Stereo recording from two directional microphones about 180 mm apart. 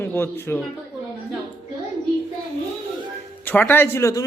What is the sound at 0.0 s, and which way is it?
Speech, 15° left (ahead or behind).